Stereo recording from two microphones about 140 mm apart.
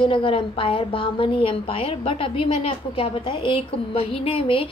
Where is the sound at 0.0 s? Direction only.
40° left (ahead or behind).